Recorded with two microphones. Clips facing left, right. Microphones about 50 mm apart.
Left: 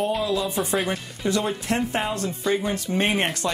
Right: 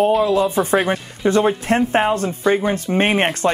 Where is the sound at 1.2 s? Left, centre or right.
Right.